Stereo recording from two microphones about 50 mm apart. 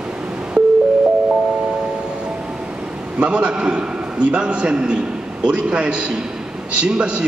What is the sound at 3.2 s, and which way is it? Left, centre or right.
A man's voice, right.